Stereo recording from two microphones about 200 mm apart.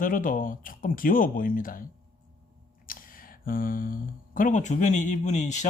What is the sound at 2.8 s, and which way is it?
Speech, 45° left (ahead or behind).